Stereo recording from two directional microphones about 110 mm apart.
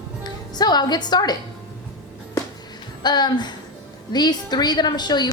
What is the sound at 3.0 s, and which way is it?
A woman's voice, 40° left (ahead or behind).